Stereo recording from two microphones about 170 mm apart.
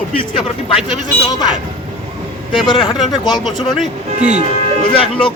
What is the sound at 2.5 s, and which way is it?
Speech, 30° left (ahead or behind).